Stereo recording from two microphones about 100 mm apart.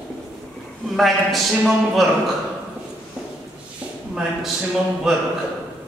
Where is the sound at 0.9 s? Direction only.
Centre (ahead or behind).